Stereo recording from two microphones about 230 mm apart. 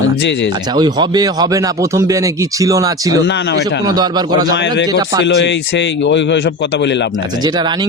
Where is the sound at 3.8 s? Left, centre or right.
Centre.